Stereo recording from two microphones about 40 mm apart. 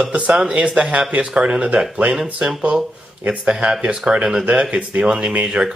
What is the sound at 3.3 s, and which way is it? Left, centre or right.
Speech, right.